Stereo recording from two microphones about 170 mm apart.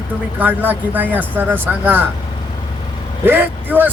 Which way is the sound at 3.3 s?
10° right (ahead or behind).